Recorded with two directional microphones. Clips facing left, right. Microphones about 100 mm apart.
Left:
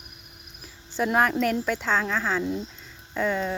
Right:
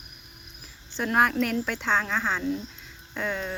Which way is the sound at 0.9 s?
5° left (ahead or behind).